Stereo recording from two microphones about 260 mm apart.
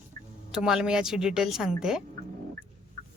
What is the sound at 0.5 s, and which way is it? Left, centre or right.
Speech, centre.